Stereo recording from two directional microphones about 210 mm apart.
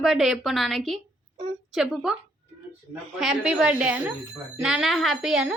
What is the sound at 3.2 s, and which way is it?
Speech, centre (ahead or behind).